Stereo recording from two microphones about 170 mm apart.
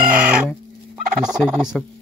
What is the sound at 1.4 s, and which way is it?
Fowl, 25° right (ahead or behind).